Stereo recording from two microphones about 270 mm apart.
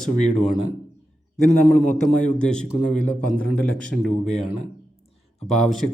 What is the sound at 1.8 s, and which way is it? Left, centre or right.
Speech, left.